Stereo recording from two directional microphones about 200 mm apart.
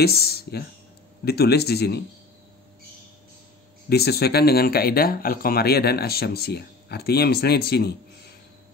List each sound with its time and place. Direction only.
0.0 s speech: 50° left (ahead or behind)
3.9 s speech: 55° left (ahead or behind)